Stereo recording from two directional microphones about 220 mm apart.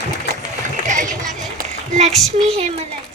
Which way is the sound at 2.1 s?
Centre (ahead or behind).